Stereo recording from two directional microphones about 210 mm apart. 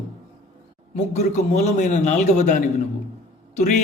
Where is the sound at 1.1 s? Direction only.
35° left (ahead or behind).